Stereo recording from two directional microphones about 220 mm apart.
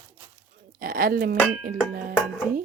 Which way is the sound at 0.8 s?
40° right (ahead or behind).